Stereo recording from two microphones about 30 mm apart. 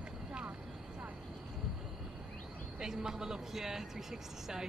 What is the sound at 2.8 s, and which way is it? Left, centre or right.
Speech, right.